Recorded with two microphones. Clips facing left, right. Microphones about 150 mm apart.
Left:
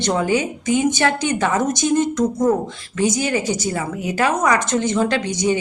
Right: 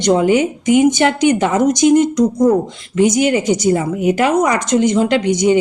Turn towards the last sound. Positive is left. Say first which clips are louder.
# right 6 dB
turn(degrees=-20)  # may be behind; listen again after turning